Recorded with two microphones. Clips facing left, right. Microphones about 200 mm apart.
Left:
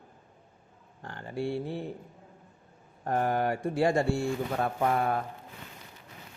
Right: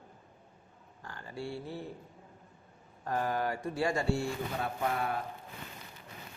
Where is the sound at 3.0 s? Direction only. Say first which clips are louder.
Left 5 dB; 55° left (ahead or behind).